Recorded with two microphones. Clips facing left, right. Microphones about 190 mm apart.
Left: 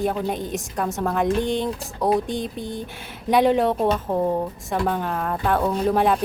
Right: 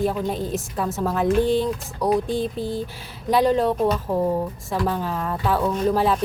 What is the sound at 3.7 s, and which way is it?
Speech, 25° left (ahead or behind).